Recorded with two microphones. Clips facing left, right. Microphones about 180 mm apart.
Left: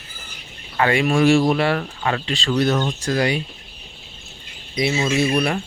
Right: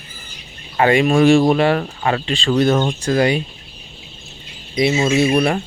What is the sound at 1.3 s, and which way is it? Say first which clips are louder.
Speech: right 4 dB; 40° right (ahead or behind).